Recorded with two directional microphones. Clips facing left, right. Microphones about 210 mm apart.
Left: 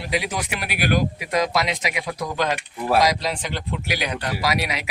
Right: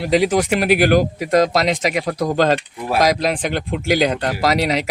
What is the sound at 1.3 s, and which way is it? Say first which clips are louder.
Speech: right 8 dB; 60° right (ahead or behind).